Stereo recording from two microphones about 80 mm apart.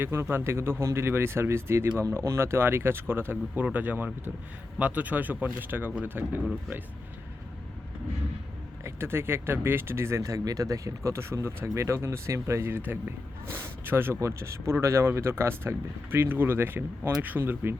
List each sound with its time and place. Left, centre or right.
0.0 s speech: right
8.8 s speech: right